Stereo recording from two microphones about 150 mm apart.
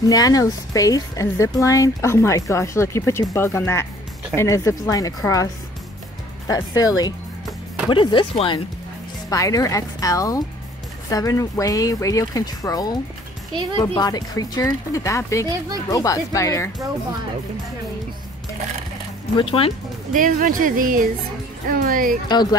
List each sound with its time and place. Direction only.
0.1 s speech: 25° left (ahead or behind)
9.3 s speech: 20° left (ahead or behind)
19.3 s speech: 35° left (ahead or behind)
20.1 s speech: 60° right (ahead or behind)
22.3 s speech: 30° left (ahead or behind)